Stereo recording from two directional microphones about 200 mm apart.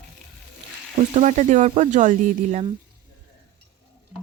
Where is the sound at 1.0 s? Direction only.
35° right (ahead or behind).